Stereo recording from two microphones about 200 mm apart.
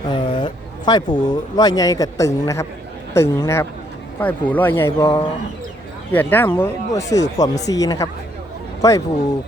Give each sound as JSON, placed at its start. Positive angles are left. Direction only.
{"t": 0.1, "sound": "speech", "side_deg": 25}